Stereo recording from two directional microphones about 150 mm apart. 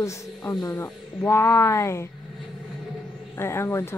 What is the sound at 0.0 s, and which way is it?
Speech, 20° left (ahead or behind).